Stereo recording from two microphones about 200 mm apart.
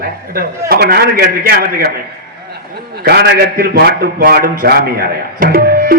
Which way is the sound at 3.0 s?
50° right (ahead or behind).